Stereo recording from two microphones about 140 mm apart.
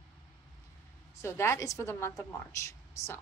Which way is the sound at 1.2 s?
20° left (ahead or behind).